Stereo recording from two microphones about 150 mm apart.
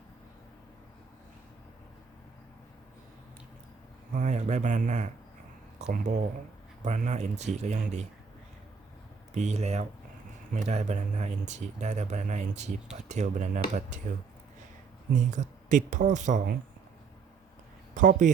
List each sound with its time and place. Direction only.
4.1 s speech: 55° right (ahead or behind)
9.3 s speech: 50° right (ahead or behind)
15.1 s speech: 55° right (ahead or behind)
17.9 s speech: 60° right (ahead or behind)